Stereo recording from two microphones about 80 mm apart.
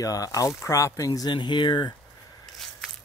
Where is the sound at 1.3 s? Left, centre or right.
Left.